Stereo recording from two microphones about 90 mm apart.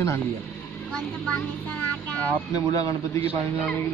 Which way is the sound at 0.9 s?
15° left (ahead or behind).